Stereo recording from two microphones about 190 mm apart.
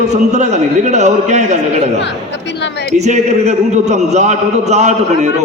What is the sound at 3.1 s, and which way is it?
A man's voice, 40° right (ahead or behind).